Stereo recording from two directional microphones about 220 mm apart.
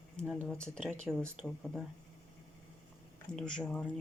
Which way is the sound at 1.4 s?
Centre (ahead or behind).